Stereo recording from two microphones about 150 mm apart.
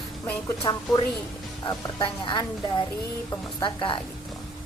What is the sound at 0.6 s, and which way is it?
A woman's voice, 35° left (ahead or behind).